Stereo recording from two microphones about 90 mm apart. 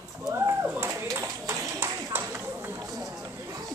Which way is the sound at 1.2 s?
40° right (ahead or behind).